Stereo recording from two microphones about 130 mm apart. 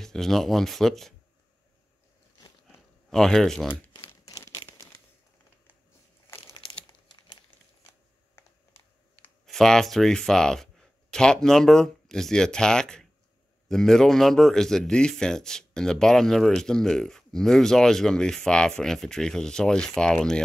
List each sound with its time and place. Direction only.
0.0 s speech: 5° left (ahead or behind)
3.1 s speech: 5° left (ahead or behind)
3.9 s crumpling: 25° left (ahead or behind)
6.4 s crumpling: 45° left (ahead or behind)
9.5 s speech: 5° left (ahead or behind)